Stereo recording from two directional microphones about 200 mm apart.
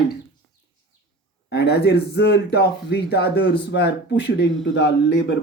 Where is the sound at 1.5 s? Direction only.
55° left (ahead or behind).